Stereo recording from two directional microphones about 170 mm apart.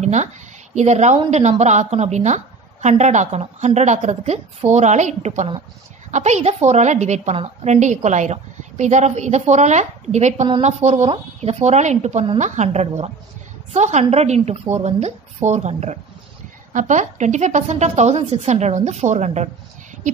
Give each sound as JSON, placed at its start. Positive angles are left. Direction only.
{"t": 0.0, "sound": "a woman's voice", "side_deg": -45}